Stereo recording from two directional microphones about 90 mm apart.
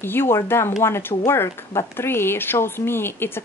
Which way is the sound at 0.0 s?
25° left (ahead or behind).